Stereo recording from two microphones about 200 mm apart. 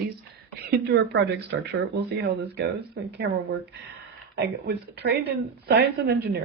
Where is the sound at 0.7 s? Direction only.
55° right (ahead or behind).